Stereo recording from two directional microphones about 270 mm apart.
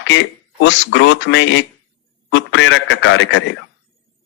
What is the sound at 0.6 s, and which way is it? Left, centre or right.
A man's voice, left.